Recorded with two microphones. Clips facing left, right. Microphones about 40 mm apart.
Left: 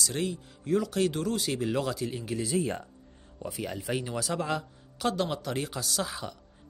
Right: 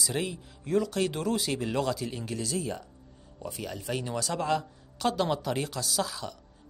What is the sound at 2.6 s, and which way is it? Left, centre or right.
Speech, left.